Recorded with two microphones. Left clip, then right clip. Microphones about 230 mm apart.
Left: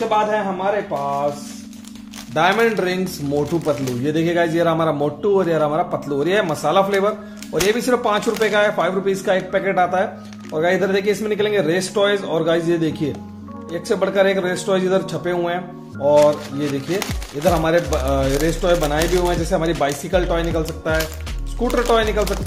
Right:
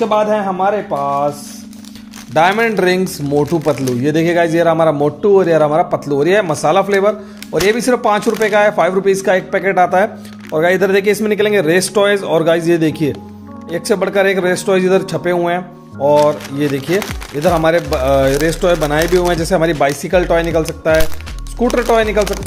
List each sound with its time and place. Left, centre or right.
0.0 s speech: right
2.3 s a man's voice: right